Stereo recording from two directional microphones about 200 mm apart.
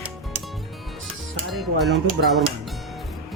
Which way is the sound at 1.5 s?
Centre (ahead or behind).